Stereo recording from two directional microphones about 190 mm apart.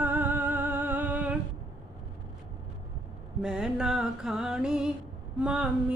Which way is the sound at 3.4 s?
5° right (ahead or behind).